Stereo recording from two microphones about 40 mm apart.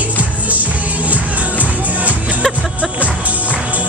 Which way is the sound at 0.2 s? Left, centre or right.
Right.